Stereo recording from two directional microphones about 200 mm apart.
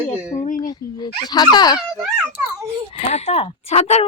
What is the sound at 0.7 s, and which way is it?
Speech, 20° left (ahead or behind).